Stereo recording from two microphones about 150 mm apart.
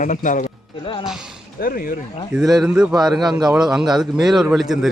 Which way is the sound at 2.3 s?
5° right (ahead or behind).